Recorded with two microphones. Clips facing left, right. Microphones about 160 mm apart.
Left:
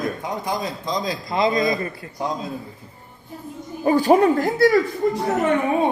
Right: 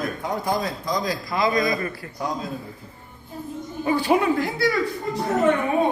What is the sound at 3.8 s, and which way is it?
Speech, 40° left (ahead or behind).